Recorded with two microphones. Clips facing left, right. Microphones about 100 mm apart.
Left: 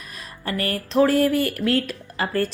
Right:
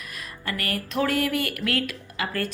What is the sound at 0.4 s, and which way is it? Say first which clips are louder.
Speech: left 4 dB; 30° left (ahead or behind).